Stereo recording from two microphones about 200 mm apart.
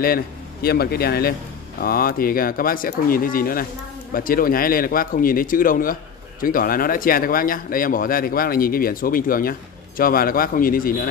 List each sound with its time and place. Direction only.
0.0 s speech: 50° left (ahead or behind)